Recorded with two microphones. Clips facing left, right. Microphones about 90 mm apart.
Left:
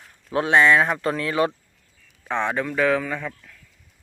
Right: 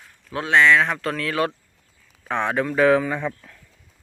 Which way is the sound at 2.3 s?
10° right (ahead or behind).